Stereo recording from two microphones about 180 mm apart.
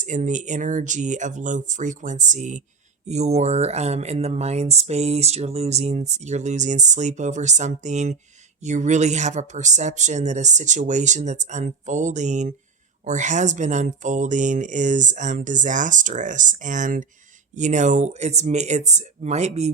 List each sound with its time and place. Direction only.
0.0 s speech: 45° right (ahead or behind)